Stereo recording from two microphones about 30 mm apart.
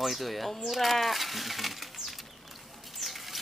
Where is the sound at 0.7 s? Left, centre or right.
Centre.